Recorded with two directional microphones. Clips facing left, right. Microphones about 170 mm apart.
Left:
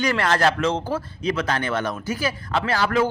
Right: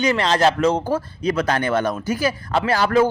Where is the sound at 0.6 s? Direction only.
40° right (ahead or behind).